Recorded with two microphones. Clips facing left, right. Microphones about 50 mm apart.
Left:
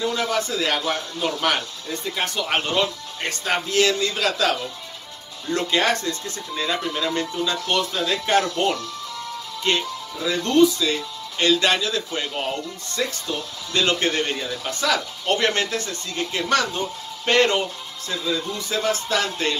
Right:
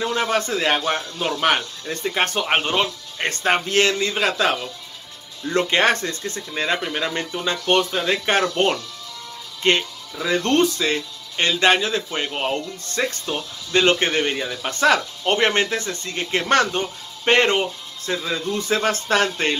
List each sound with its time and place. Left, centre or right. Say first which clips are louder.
0.0 s a man's voice: right 2 dB; right
1.9 s speech: right 5 dB; right
2.4 s a man's voice: right 2 dB; right
10.5 s speech: left 4 dB; right
13.7 s a man's voice: right 4 dB; right
14.6 s speech: right 7 dB; right
17.2 s speech: right 2 dB; right